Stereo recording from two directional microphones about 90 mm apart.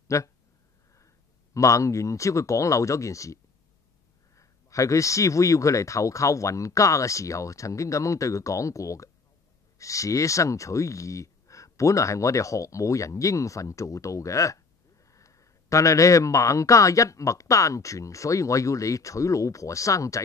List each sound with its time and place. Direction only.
0.1 s speech: 35° left (ahead or behind)
4.4 s speech: 35° left (ahead or behind)